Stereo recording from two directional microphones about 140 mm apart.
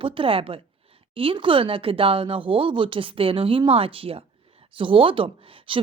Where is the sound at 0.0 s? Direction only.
40° right (ahead or behind).